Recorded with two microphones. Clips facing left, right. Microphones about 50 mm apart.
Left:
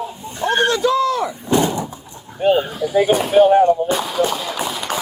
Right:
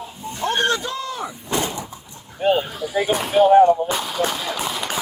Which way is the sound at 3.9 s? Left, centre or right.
Centre.